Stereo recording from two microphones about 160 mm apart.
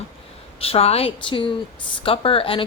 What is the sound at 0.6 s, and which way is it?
A woman's voice, 40° left (ahead or behind).